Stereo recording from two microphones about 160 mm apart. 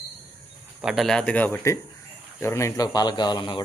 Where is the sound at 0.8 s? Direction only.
Centre (ahead or behind).